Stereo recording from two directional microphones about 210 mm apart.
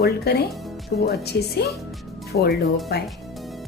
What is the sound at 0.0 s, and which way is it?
A woman's voice, 50° left (ahead or behind).